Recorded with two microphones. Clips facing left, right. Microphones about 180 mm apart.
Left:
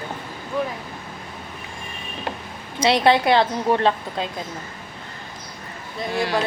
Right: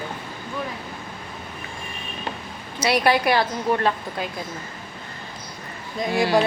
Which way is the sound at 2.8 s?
25° left (ahead or behind).